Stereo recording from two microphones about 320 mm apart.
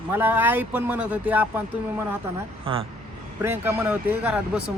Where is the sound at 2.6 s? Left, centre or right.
Centre.